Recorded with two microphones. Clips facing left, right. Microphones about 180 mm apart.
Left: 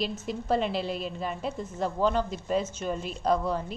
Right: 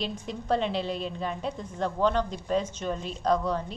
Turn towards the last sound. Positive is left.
turn(degrees=10)  # may be behind; listen again after turning